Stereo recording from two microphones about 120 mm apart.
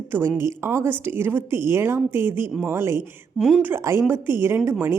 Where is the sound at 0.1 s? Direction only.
20° right (ahead or behind).